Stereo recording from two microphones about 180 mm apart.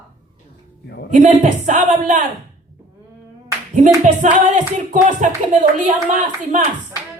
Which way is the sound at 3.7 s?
45° right (ahead or behind).